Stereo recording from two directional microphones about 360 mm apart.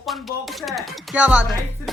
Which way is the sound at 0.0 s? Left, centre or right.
Centre.